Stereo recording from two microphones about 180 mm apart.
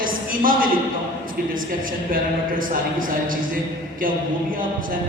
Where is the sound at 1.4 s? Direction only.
55° right (ahead or behind).